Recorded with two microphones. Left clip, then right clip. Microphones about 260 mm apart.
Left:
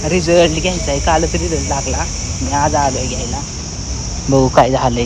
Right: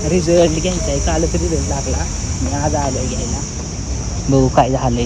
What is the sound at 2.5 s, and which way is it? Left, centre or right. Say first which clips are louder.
Speech: left 6 dB; centre.